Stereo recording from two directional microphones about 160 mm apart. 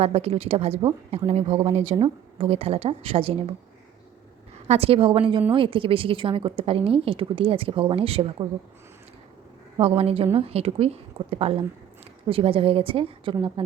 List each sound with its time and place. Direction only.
0.0 s speech: 40° right (ahead or behind)
1.3 s speech: 40° right (ahead or behind)
4.7 s speech: 40° right (ahead or behind)
10.0 s speech: 40° right (ahead or behind)